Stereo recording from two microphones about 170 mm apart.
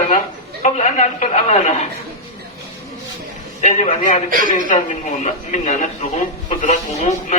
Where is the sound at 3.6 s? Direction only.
45° left (ahead or behind).